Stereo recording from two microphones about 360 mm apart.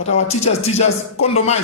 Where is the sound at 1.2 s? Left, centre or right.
Centre.